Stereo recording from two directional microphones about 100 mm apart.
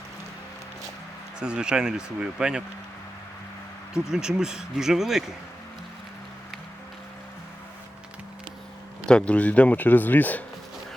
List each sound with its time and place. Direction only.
1.4 s speech: 10° right (ahead or behind)
4.1 s speech: 5° right (ahead or behind)
9.0 s speech: 10° left (ahead or behind)